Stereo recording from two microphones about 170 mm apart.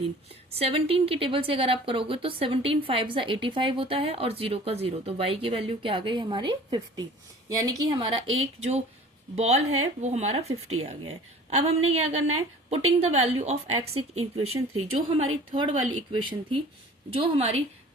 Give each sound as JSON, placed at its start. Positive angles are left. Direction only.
{"t": 0.5, "sound": "a woman's voice", "side_deg": -35}
{"t": 17.1, "sound": "a woman's voice", "side_deg": -35}